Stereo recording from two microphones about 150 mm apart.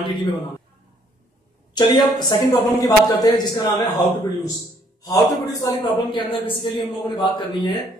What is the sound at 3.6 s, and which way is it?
Speech, 15° left (ahead or behind).